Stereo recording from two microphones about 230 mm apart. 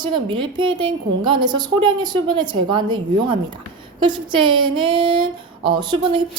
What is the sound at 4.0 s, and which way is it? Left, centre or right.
A woman's voice, right.